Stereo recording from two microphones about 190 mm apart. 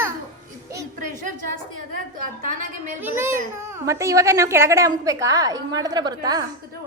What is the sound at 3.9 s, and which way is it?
A woman's voice, 15° right (ahead or behind).